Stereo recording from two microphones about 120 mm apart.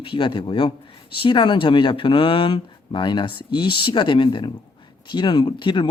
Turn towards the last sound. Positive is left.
turn(degrees=40)  # may be behind; listen again after turning